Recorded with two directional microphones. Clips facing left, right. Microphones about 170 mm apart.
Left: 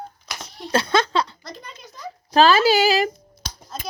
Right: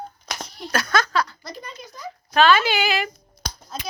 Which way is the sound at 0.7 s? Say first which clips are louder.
Left 3 dB; 25° left (ahead or behind).